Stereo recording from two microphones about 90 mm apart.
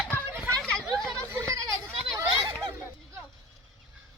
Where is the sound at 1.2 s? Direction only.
30° right (ahead or behind).